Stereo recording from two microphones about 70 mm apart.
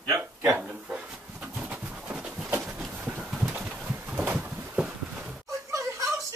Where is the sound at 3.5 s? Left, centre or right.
Centre.